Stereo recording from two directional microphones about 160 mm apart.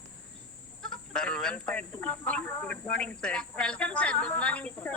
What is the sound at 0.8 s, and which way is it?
Speech, 5° left (ahead or behind).